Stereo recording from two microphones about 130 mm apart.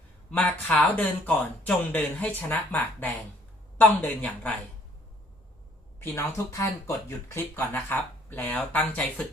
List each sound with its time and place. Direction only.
0.3 s speech: 10° left (ahead or behind)
6.0 s speech: 15° left (ahead or behind)